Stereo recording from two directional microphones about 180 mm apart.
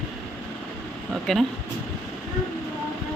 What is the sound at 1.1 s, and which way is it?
Speech, centre (ahead or behind).